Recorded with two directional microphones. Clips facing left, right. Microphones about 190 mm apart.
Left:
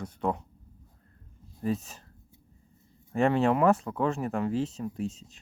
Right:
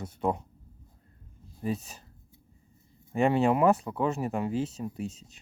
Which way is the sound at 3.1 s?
Centre (ahead or behind).